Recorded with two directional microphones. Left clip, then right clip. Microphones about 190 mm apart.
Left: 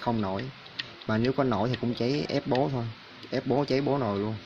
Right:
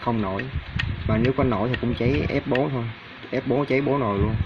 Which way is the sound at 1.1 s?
15° left (ahead or behind).